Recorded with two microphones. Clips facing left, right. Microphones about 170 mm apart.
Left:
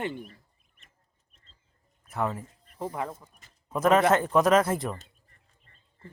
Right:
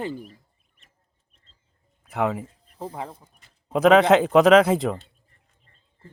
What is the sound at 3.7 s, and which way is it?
Speech, 70° right (ahead or behind).